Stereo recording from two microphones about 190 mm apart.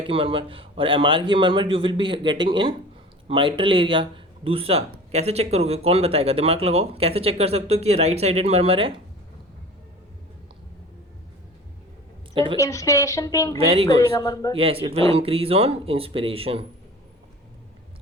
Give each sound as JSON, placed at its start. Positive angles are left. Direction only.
{"t": 0.0, "sound": "a man's voice", "side_deg": -30}
{"t": 12.3, "sound": "a woman's voice", "side_deg": -25}
{"t": 12.5, "sound": "speech", "side_deg": 15}
{"t": 13.6, "sound": "speech", "side_deg": -30}
{"t": 14.0, "sound": "speech", "side_deg": 20}
{"t": 14.5, "sound": "speech", "side_deg": -30}